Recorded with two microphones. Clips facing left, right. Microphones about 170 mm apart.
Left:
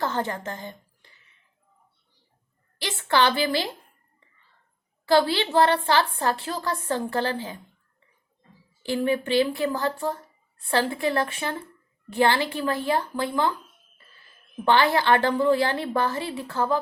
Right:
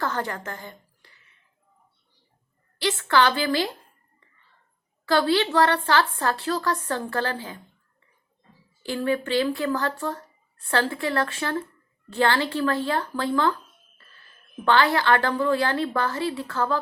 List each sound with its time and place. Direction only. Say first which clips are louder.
0.0 s a woman's voice: left 1 dB; 20° left (ahead or behind)
3.1 s a woman's voice: even; 20° left (ahead or behind)
5.0 s a woman's voice: even; 20° left (ahead or behind)
8.8 s a woman's voice: left 1 dB; 20° left (ahead or behind)
14.6 s a woman's voice: even; 20° left (ahead or behind)